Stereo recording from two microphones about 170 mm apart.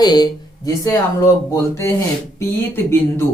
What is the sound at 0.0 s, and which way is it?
Speech, 25° left (ahead or behind).